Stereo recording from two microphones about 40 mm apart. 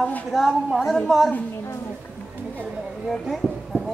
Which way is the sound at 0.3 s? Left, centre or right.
Centre.